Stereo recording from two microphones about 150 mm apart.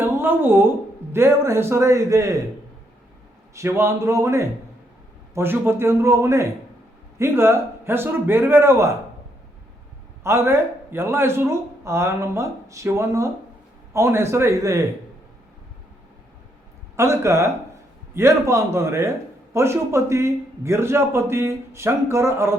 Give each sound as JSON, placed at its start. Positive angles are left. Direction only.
{"t": 0.0, "sound": "a woman's voice", "side_deg": -15}
{"t": 3.5, "sound": "a man's voice", "side_deg": -20}
{"t": 10.2, "sound": "a man's voice", "side_deg": -15}
{"t": 17.0, "sound": "a man's voice", "side_deg": -20}